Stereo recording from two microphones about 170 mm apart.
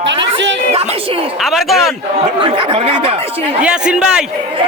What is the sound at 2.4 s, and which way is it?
Speech, 30° right (ahead or behind).